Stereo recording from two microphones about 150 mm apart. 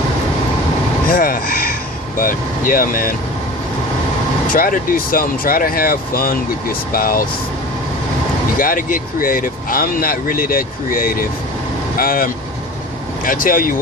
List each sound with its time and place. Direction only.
1.0 s vehicle: 75° left (ahead or behind)
2.1 s speech: 70° left (ahead or behind)
4.4 s speech: 65° left (ahead or behind)
8.5 s speech: 65° left (ahead or behind)